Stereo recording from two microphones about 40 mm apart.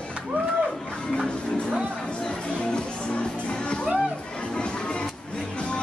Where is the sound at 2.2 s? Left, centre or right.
Left.